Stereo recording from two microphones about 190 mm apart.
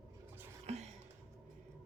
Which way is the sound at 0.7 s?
35° right (ahead or behind).